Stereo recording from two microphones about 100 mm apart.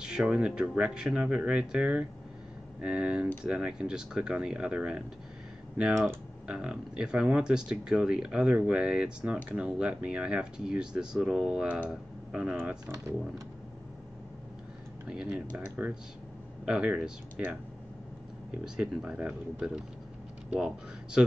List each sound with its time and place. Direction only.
0.0 s speech: 10° right (ahead or behind)
6.4 s speech: 10° right (ahead or behind)
12.5 s speech: 20° right (ahead or behind)
15.0 s speech: 10° right (ahead or behind)
18.6 s speech: 10° right (ahead or behind)